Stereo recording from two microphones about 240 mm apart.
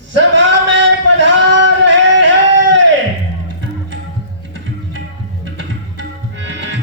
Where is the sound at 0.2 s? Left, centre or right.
Right.